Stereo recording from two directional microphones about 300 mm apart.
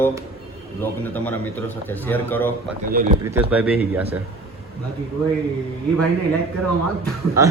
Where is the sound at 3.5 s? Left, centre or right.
Centre.